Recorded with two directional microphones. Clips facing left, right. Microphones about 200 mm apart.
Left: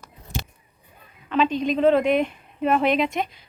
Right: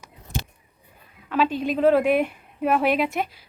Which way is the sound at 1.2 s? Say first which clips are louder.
Left 1 dB; 5° right (ahead or behind).